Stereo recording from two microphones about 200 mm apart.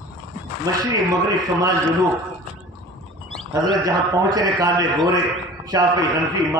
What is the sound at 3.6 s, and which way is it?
A man's voice, 20° right (ahead or behind).